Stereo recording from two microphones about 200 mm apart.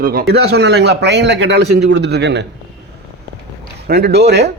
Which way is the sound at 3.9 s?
50° right (ahead or behind).